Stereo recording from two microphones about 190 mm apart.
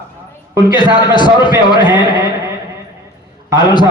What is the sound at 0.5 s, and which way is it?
A man's voice, 25° left (ahead or behind).